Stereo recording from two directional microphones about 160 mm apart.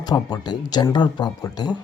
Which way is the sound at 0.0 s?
25° left (ahead or behind).